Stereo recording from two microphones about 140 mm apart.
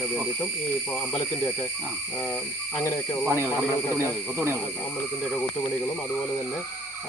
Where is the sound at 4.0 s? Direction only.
15° right (ahead or behind).